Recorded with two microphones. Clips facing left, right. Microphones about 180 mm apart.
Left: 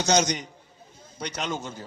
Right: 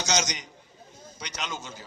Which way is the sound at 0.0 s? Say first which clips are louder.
Left 6 dB; 55° left (ahead or behind).